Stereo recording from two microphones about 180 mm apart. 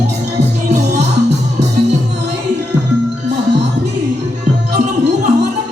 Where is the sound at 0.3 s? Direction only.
70° right (ahead or behind).